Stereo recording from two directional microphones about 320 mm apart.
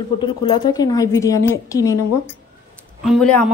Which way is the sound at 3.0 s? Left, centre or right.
Centre.